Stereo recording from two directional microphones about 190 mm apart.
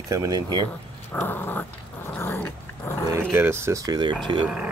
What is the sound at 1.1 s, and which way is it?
Dog, 10° left (ahead or behind).